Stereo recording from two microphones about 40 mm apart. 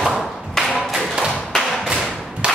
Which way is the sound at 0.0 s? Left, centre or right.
Centre.